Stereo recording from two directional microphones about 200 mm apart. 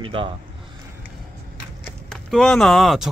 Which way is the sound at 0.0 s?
25° right (ahead or behind).